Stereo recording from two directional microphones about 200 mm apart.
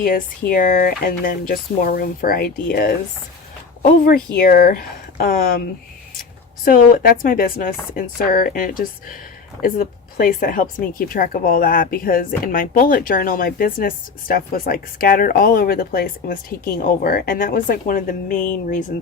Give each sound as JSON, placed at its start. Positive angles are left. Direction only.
{"t": 0.5, "sound": "speech", "side_deg": 45}
{"t": 4.0, "sound": "speech", "side_deg": 50}
{"t": 6.7, "sound": "speech", "side_deg": 45}